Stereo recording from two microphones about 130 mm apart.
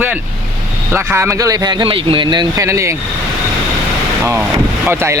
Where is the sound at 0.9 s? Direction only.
20° right (ahead or behind).